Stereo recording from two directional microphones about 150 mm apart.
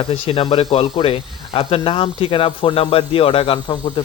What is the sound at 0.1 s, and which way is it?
Speech, 40° left (ahead or behind).